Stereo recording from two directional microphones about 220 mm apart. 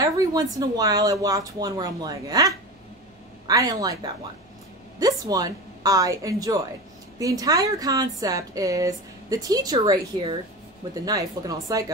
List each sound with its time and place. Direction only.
0.0 s speech: 15° right (ahead or behind)